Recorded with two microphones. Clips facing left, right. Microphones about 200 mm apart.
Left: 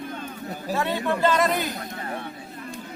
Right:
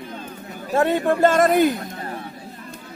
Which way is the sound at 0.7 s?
50° right (ahead or behind).